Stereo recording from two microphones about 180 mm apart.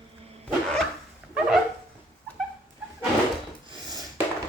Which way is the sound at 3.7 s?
25° right (ahead or behind).